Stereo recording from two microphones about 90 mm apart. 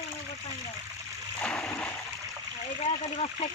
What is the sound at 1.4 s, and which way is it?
Splash, 15° left (ahead or behind).